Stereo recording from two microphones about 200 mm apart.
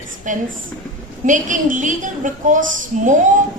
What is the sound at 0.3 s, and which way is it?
A woman's voice, 40° right (ahead or behind).